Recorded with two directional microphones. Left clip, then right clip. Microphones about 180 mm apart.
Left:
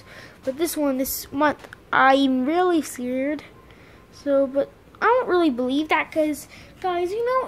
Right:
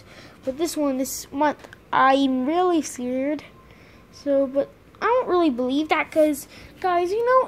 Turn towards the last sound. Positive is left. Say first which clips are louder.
# right 4 dB
turn(degrees=10)  # may be behind; listen again after turning